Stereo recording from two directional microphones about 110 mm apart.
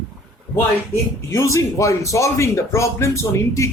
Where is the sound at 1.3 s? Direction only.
25° left (ahead or behind).